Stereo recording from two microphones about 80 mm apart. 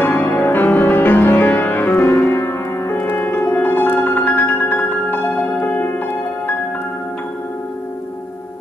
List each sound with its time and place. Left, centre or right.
0.0 s music: left
2.0 s music: left